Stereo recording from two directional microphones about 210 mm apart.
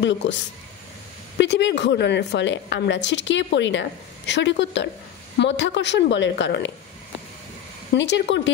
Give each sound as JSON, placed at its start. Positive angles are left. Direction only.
{"t": 0.2, "sound": "a woman's voice", "side_deg": 60}
{"t": 1.4, "sound": "a woman's voice", "side_deg": 55}
{"t": 7.9, "sound": "a woman's voice", "side_deg": 55}